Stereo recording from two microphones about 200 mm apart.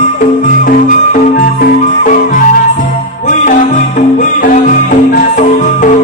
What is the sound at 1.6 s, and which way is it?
Music, 40° left (ahead or behind).